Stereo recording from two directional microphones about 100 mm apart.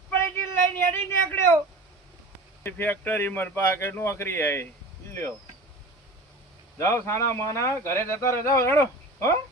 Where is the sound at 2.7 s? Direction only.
20° left (ahead or behind).